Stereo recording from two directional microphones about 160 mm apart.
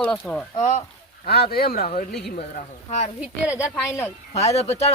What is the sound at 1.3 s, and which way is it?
Speech, 70° left (ahead or behind).